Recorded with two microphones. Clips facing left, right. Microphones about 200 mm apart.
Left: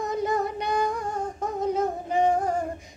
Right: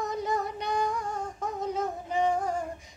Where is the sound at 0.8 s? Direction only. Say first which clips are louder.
Left 3 dB; 50° left (ahead or behind).